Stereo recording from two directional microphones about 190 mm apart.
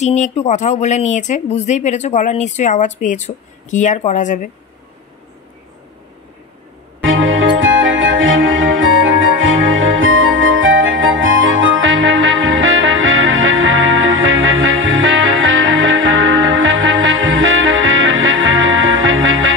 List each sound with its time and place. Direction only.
0.0 s speech: 35° left (ahead or behind)
7.0 s music: 90° right